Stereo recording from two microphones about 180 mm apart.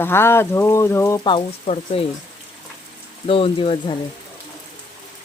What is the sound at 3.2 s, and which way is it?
Speech, 30° left (ahead or behind).